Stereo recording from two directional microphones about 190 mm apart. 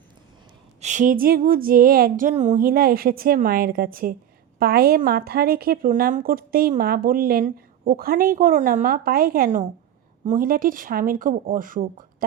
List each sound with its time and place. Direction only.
0.8 s speech: 40° right (ahead or behind)